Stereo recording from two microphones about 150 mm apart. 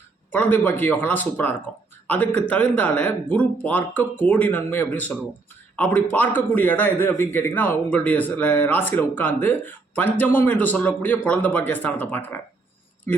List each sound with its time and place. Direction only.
0.3 s a man's voice: 10° left (ahead or behind)